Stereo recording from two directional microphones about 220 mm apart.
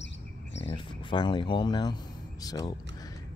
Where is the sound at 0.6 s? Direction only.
20° left (ahead or behind).